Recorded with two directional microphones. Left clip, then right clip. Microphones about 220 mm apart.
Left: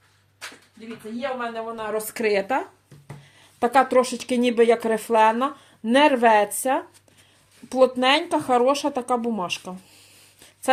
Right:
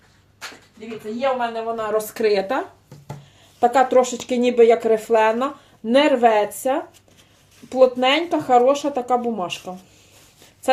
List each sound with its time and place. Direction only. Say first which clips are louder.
1.4 s speech: right 6 dB; 30° left (ahead or behind)